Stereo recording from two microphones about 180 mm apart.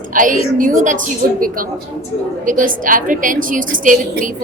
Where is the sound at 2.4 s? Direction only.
45° right (ahead or behind).